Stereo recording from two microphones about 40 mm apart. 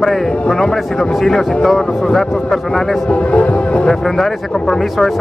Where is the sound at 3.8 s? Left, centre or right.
Centre.